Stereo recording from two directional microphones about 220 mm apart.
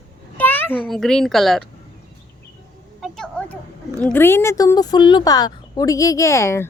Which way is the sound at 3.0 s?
5° left (ahead or behind).